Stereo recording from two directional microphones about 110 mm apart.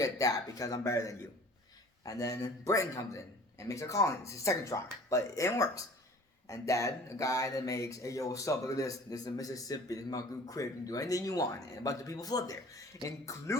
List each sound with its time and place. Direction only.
0.0 s speech: 35° left (ahead or behind)